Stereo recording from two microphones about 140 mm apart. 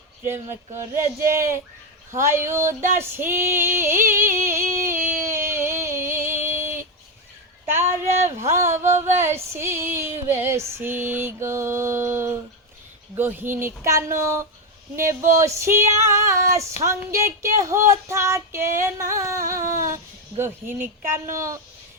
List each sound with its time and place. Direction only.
0.3 s speech: 20° right (ahead or behind)
1.3 s female singing: 20° right (ahead or behind)
3.8 s a sound: 15° right (ahead or behind)
9.1 s female singing: 15° right (ahead or behind)
13.1 s speech: 15° right (ahead or behind)
15.2 s female singing: 20° right (ahead or behind)
20.4 s speech: 15° right (ahead or behind)
21.1 s female singing: 20° right (ahead or behind)